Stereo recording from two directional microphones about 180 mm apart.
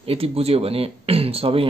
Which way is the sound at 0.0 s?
35° right (ahead or behind).